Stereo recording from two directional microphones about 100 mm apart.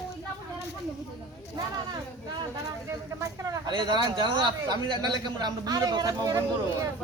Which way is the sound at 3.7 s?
50° right (ahead or behind).